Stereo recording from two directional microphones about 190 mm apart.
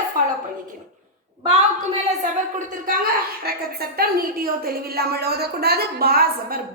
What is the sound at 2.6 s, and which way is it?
A woman's voice, 45° right (ahead or behind).